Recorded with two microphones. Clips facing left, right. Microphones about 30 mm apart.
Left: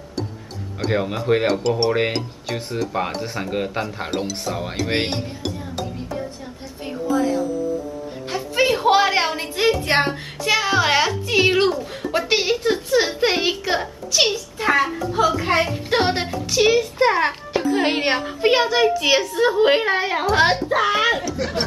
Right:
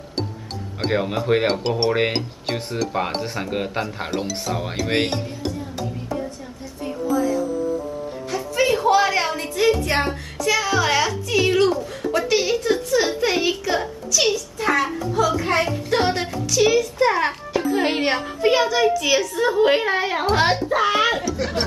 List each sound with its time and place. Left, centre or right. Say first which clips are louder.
0.9 s a child's voice: even; centre
3.2 s a child's voice: left 1 dB; centre
6.8 s a sound: left 1 dB; left
8.3 s a woman's voice: left 1 dB; left
17.5 s music: left 1 dB; centre
18.0 s a woman's voice: left 1 dB; left; by 21.6 s centre